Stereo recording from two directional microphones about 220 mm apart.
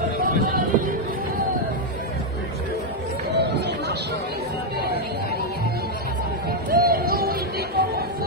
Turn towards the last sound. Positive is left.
turn(degrees=-45)  # may be behind; listen again after turning